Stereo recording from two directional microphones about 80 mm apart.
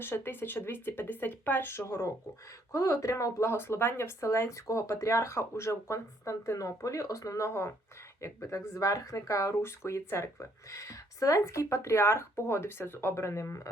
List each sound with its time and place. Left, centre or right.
0.0 s speech: left